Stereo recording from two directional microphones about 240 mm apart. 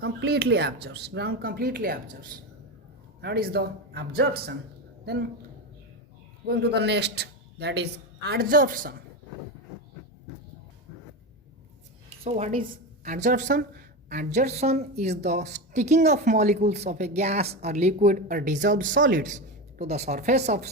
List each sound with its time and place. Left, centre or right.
0.0 s a woman's voice: right
6.4 s a man's voice: right
12.2 s a woman's voice: right
18.9 s speech: right
19.8 s speech: right